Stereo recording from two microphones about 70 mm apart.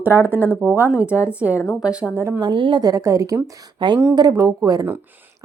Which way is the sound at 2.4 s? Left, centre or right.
Right.